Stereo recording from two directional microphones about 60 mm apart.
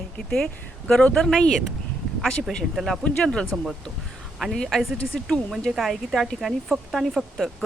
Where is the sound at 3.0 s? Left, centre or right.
Centre.